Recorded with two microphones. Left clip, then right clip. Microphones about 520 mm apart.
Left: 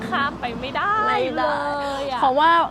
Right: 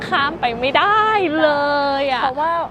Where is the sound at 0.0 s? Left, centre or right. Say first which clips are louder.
Right 5 dB; right.